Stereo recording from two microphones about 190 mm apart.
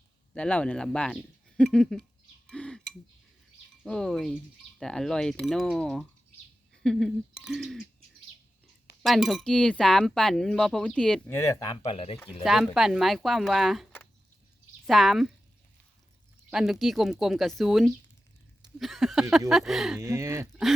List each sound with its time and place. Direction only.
0.3 s speech: 5° left (ahead or behind)
2.5 s a sound: 5° left (ahead or behind)
3.8 s speech: 5° left (ahead or behind)
9.0 s speech: centre (ahead or behind); by 11.8 s 15° left (ahead or behind)
11.8 s speech: 30° left (ahead or behind)
12.3 s speech: centre (ahead or behind)
16.5 s speech: centre (ahead or behind)
20.0 s speech: 15° right (ahead or behind)